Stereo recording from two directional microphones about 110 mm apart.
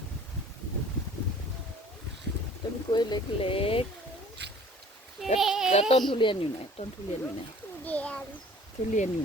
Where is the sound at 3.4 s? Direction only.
55° left (ahead or behind).